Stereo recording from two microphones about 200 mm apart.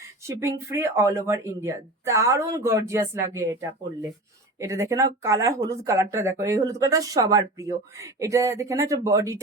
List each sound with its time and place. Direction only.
0.3 s speech: 15° right (ahead or behind)